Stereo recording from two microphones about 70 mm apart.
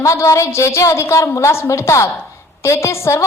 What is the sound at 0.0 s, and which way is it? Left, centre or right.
A woman's voice, left.